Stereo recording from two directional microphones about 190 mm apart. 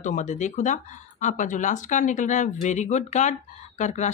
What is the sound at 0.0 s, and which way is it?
A woman's voice, 40° left (ahead or behind).